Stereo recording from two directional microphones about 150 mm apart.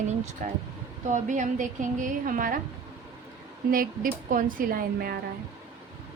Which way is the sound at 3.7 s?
70° right (ahead or behind).